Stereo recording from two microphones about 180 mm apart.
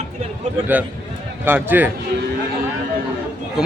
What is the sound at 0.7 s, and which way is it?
A man's voice, 10° right (ahead or behind).